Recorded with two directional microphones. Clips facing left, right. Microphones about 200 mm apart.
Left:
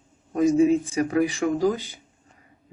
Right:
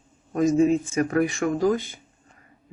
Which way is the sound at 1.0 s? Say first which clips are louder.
Even; 15° left (ahead or behind).